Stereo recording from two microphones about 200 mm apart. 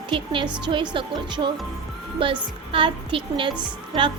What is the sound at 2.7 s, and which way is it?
Speech, 25° right (ahead or behind).